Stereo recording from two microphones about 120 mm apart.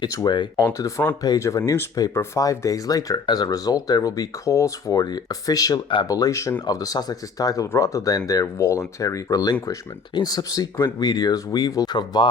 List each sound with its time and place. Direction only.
0.0 s speech: 35° left (ahead or behind)